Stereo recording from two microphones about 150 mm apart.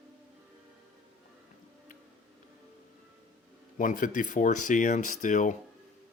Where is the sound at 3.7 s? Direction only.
60° left (ahead or behind).